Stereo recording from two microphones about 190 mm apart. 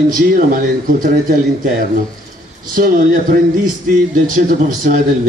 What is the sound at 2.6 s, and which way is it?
Speech, 45° right (ahead or behind).